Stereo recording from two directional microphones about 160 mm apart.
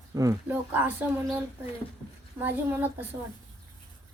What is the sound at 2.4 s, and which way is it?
Speech, 15° right (ahead or behind).